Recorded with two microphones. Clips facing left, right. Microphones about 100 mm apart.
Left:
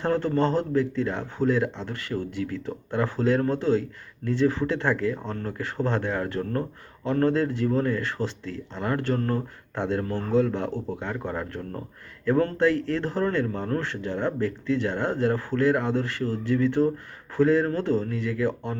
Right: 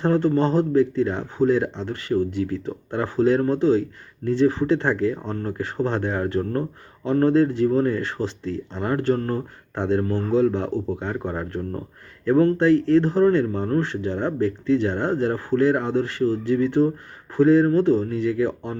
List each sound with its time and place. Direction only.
0.0 s speech: 20° right (ahead or behind)